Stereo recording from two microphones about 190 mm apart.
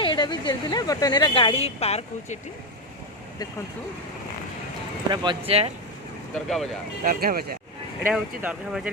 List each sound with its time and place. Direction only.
0.0 s speech: 25° left (ahead or behind)
5.1 s speech: 25° right (ahead or behind)
6.5 s speech: centre (ahead or behind)
7.0 s speech: 50° right (ahead or behind)
8.0 s speech: 10° right (ahead or behind)